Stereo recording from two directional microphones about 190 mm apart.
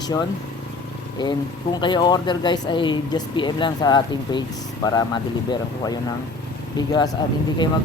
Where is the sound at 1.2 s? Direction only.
25° left (ahead or behind).